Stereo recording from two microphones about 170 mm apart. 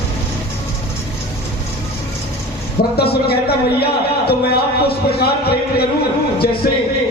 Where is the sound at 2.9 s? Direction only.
65° left (ahead or behind).